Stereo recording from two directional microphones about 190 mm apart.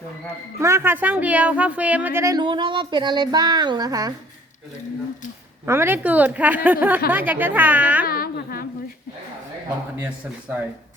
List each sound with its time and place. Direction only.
0.6 s speech: 15° right (ahead or behind)
5.6 s speech: 10° right (ahead or behind)
8.0 s a sound: 50° left (ahead or behind)